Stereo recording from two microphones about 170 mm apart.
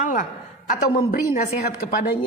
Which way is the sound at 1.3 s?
60° left (ahead or behind).